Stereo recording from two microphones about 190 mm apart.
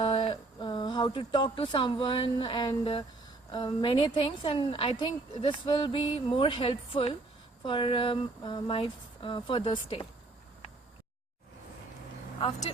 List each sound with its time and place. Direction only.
0.0 s a woman's voice: 30° left (ahead or behind)
12.4 s speech: 30° left (ahead or behind)